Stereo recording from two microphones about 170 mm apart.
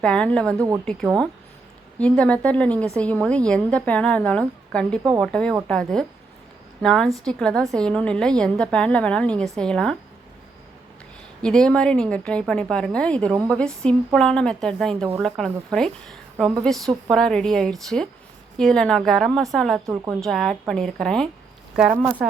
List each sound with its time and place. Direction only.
0.0 s a woman's voice: 5° left (ahead or behind)
2.0 s a woman's voice: 5° left (ahead or behind)
11.4 s a woman's voice: 5° left (ahead or behind)